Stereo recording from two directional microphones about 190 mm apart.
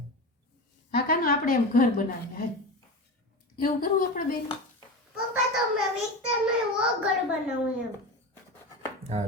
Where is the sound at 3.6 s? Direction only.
50° left (ahead or behind).